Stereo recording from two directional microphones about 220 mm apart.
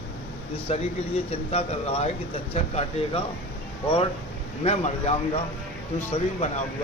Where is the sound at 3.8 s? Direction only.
25° left (ahead or behind).